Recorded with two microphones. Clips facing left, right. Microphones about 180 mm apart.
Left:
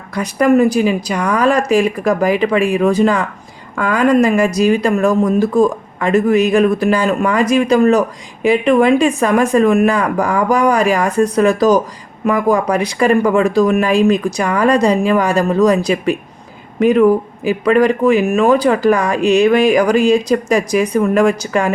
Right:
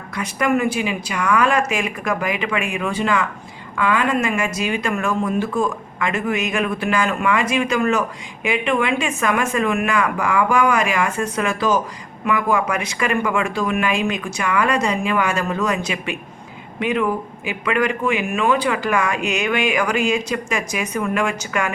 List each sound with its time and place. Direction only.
0.1 s speech: 35° left (ahead or behind)